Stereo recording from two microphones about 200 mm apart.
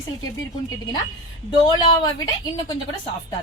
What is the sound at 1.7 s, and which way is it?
Speech, 20° left (ahead or behind).